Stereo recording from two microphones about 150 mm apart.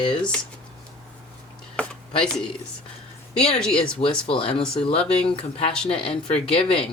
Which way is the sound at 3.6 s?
5° left (ahead or behind).